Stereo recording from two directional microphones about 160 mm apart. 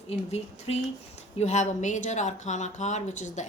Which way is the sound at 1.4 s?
45° left (ahead or behind).